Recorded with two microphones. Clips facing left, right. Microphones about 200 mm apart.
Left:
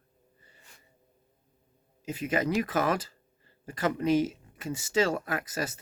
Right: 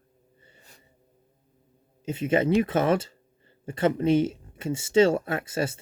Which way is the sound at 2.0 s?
25° right (ahead or behind).